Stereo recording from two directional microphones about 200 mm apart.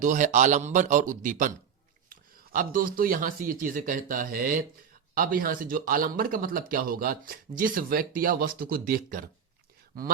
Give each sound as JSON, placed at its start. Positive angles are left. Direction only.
{"t": 0.0, "sound": "a man's voice", "side_deg": -40}